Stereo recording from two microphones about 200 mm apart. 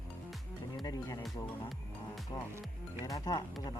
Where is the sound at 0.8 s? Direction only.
20° left (ahead or behind).